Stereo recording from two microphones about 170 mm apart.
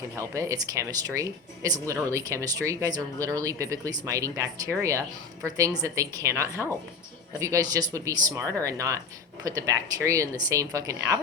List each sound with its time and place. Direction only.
0.2 s speech: 20° right (ahead or behind)